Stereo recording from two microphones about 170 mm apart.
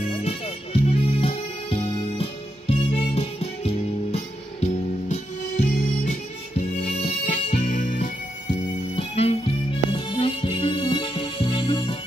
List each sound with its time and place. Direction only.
0.0 s music: 35° left (ahead or behind)
8.9 s music: 35° left (ahead or behind)